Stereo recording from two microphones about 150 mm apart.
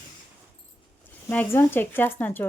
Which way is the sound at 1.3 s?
15° left (ahead or behind).